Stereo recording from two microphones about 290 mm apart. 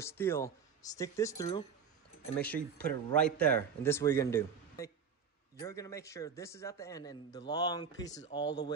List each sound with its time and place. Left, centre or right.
0.0 s speech: centre